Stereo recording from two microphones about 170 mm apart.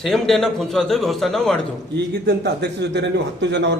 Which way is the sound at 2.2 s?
80° right.